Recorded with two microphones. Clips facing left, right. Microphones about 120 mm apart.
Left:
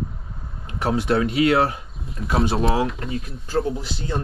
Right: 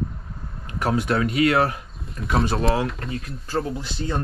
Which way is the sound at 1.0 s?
30° left (ahead or behind).